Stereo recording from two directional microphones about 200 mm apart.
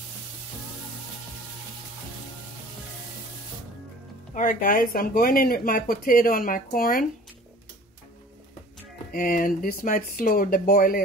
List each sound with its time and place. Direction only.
4.3 s speech: 40° left (ahead or behind)
9.1 s speech: 45° left (ahead or behind)